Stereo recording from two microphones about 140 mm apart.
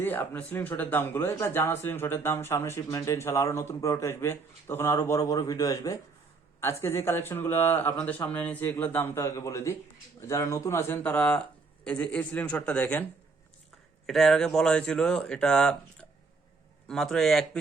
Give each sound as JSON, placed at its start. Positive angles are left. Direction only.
{"t": 0.0, "sound": "speech", "side_deg": 15}
{"t": 14.1, "sound": "speech", "side_deg": 0}